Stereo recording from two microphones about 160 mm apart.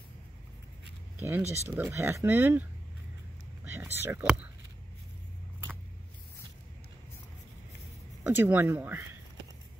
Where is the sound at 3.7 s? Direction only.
15° right (ahead or behind).